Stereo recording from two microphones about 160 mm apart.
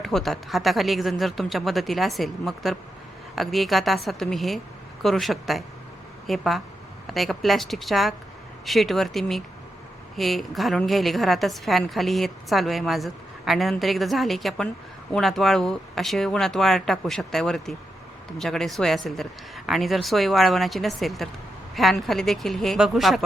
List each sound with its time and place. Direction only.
0.0 s a woman's voice: centre (ahead or behind)